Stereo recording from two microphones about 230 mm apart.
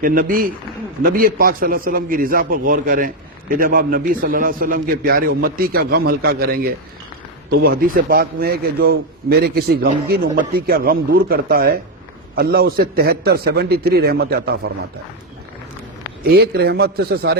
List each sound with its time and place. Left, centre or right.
0.0 s a man's voice: right
16.2 s a man's voice: right